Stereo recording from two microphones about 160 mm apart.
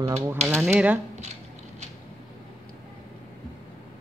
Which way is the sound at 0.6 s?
10° right (ahead or behind).